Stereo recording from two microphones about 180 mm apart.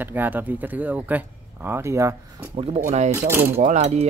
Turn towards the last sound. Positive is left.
turn(degrees=-40)  # may be behind; listen again after turning